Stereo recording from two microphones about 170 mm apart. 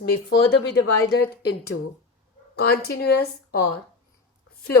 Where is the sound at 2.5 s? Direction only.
65° left (ahead or behind).